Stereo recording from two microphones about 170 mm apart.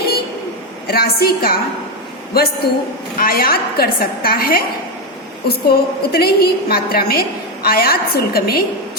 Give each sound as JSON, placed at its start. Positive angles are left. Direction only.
{"t": 0.9, "sound": "a woman's voice", "side_deg": 65}